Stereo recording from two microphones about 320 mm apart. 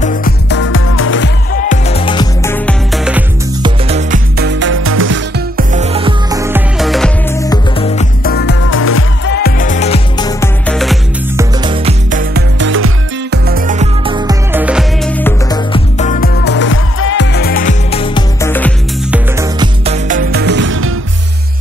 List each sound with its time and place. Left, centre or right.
0.0 s music: left; by 3.3 s centre
3.6 s music: centre; by 5.7 s right
5.7 s music: centre
11.6 s music: centre
19.1 s music: centre; by 20.9 s right